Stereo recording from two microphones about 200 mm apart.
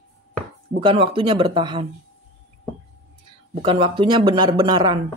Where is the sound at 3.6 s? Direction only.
25° right (ahead or behind).